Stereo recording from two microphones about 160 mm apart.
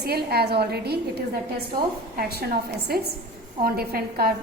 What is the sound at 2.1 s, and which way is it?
A woman's voice, 70° right (ahead or behind).